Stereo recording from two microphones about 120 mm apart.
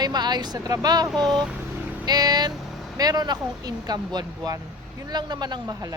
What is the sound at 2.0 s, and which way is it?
Speech, 35° right (ahead or behind).